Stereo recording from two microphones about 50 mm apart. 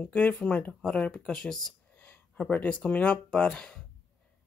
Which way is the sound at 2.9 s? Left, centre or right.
Left.